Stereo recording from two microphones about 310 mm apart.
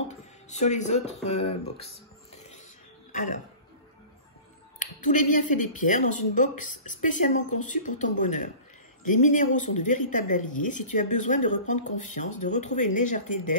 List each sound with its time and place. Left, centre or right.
0.1 s speech: left
3.1 s music: left
4.7 s a woman's voice: left